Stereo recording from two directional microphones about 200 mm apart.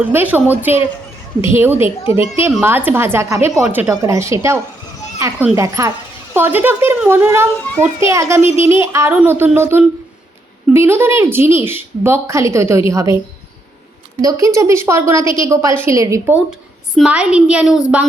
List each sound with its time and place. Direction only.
0.0 s a child's voice: 10° right (ahead or behind)
14.2 s a child's voice: 15° right (ahead or behind)
16.5 s a woman's voice: 5° right (ahead or behind)